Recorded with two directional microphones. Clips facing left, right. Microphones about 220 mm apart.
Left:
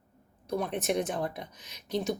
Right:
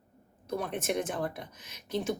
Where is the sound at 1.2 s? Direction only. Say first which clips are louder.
Even; 50° right (ahead or behind).